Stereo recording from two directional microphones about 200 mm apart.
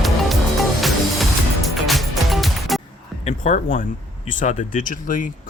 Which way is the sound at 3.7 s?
40° left (ahead or behind).